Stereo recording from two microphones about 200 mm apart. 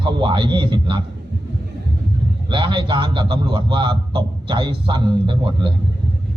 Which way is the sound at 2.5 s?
25° right (ahead or behind).